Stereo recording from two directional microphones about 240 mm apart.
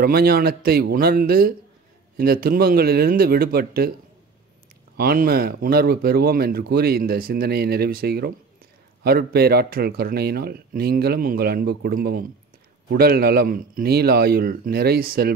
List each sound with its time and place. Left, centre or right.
0.0 s speech: right
4.9 s speech: right